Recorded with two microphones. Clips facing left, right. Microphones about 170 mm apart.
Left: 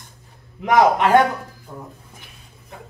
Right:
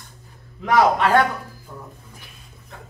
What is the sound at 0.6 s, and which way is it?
A man's voice, 20° left (ahead or behind).